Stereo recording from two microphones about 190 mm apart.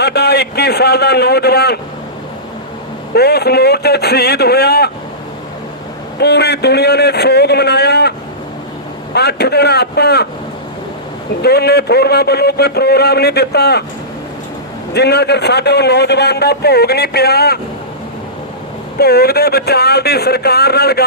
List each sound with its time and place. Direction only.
0.0 s a man's voice: 60° left (ahead or behind)
3.2 s a man's voice: 60° left (ahead or behind)
6.1 s a man's voice: 60° left (ahead or behind)
9.1 s a man's voice: 60° left (ahead or behind)
11.4 s a man's voice: 55° left (ahead or behind)
14.9 s a man's voice: 60° left (ahead or behind)
18.9 s a man's voice: 55° left (ahead or behind)